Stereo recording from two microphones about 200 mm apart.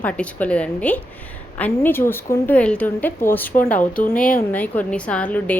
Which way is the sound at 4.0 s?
45° left (ahead or behind).